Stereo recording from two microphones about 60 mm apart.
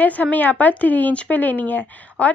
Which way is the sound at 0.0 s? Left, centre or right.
Left.